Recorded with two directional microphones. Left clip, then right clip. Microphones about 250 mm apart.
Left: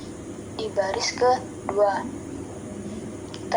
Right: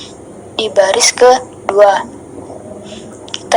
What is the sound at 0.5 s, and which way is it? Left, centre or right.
Speech, right.